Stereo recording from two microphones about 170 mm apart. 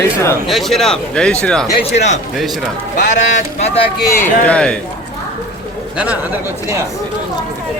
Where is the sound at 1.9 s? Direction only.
40° left (ahead or behind).